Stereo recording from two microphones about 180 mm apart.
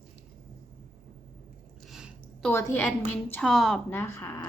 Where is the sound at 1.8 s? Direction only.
5° right (ahead or behind).